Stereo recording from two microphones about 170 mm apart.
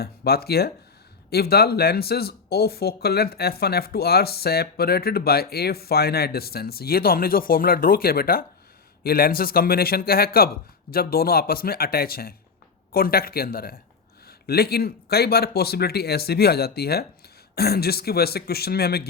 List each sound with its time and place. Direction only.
0.0 s speech: 65° left (ahead or behind)